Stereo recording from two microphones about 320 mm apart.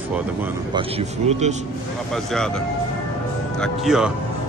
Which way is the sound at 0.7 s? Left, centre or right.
Centre.